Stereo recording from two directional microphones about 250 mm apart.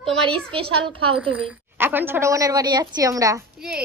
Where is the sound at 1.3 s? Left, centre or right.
Centre.